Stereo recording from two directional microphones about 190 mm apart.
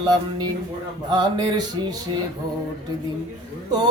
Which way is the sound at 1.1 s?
20° right (ahead or behind).